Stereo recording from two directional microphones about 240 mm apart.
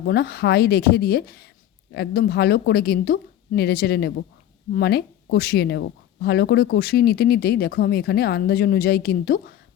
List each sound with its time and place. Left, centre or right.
0.0 s speech: left